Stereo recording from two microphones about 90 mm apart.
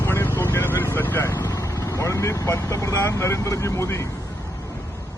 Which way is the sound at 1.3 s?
50° left (ahead or behind).